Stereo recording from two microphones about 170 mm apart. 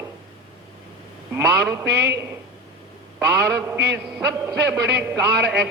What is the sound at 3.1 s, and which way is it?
A man's voice, 15° right (ahead or behind).